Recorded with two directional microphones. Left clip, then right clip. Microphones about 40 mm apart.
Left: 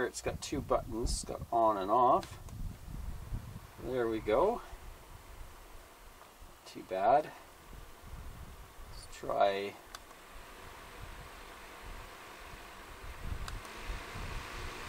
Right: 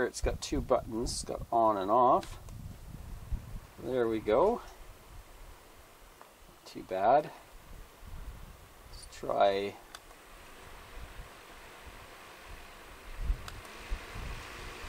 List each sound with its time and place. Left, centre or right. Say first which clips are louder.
0.0 s speech: right 3 dB; centre
3.8 s speech: right 3 dB; centre
6.7 s speech: right 2 dB; centre
9.2 s speech: right 3 dB; centre
10.6 s vehicle: left 1 dB; centre